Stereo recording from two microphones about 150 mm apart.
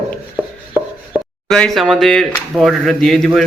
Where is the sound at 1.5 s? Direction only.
5° left (ahead or behind).